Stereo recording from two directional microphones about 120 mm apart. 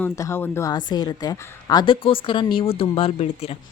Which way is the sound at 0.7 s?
35° left (ahead or behind).